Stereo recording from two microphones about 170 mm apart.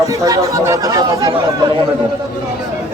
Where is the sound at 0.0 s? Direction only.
20° right (ahead or behind).